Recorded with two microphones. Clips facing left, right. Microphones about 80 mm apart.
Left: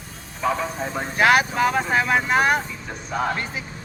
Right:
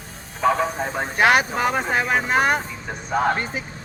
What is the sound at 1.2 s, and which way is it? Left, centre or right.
Speech, right.